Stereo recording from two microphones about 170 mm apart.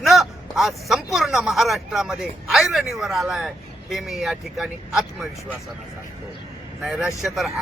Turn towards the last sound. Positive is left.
turn(degrees=0)  # may be behind; listen again after turning